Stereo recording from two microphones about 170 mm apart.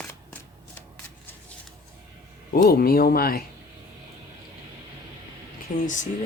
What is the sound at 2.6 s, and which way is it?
Speech, 60° left (ahead or behind).